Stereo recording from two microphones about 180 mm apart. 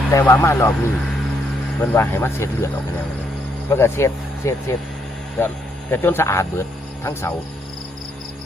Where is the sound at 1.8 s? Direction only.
15° left (ahead or behind).